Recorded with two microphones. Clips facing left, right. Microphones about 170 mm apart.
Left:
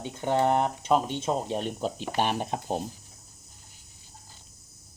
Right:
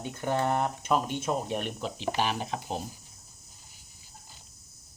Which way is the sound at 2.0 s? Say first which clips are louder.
Even; 50° left (ahead or behind).